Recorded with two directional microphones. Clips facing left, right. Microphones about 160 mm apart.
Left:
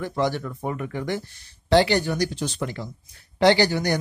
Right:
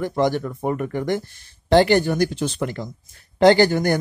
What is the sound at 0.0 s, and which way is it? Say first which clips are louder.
Speech: right 4 dB; 45° right (ahead or behind).